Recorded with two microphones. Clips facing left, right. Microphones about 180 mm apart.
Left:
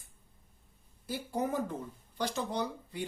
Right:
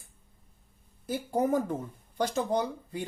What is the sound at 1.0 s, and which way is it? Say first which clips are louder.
Speech: right 6 dB; 50° right (ahead or behind).